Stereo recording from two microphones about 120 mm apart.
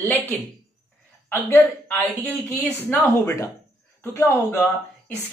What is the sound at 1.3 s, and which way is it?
Speech, 20° left (ahead or behind).